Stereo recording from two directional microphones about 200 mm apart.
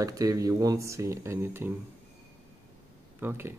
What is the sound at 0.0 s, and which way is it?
Speech, 15° right (ahead or behind).